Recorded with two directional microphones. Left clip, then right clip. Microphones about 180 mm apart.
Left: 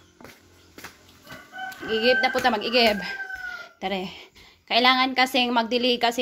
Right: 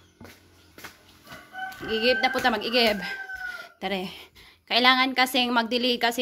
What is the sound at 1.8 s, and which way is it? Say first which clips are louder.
Speech: left 2 dB; 20° right (ahead or behind).